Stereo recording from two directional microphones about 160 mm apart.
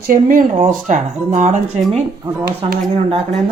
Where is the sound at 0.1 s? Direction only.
55° right (ahead or behind).